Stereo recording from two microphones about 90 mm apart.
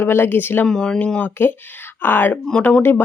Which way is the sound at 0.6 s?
5° left (ahead or behind).